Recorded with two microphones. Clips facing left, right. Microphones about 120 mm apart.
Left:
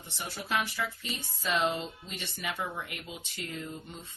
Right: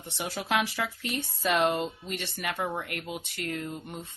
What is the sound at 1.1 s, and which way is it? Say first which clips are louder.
Speech: right 5 dB; 65° right (ahead or behind).